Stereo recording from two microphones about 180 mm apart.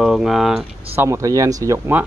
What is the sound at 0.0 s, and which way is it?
Speech, centre (ahead or behind).